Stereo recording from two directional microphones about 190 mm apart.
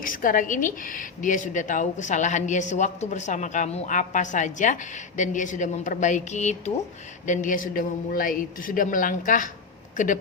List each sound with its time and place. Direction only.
0.0 s a woman's voice: 45° left (ahead or behind)